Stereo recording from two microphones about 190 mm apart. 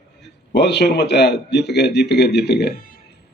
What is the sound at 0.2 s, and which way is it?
A man's voice, 65° left (ahead or behind).